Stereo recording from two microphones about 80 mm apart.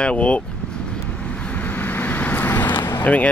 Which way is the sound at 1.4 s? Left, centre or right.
Centre.